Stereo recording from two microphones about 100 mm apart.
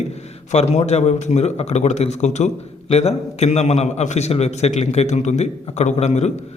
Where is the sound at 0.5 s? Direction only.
90° left.